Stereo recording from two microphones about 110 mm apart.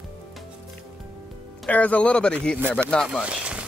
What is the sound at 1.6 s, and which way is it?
Speech, 15° left (ahead or behind).